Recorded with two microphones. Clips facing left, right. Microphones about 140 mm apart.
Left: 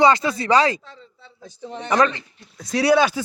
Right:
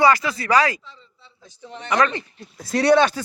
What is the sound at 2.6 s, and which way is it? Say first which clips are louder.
Speech: right 1 dB; centre (ahead or behind).